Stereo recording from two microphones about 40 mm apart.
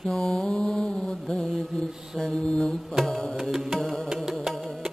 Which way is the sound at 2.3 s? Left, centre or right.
Left.